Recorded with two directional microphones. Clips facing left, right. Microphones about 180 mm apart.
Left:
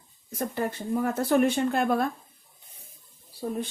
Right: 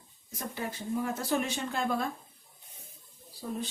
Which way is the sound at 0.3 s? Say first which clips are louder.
Left 8 dB; 55° left (ahead or behind).